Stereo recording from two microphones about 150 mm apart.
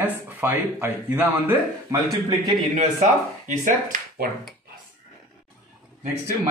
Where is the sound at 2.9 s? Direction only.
60° right (ahead or behind).